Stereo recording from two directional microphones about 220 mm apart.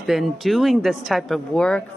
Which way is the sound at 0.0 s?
Centre (ahead or behind).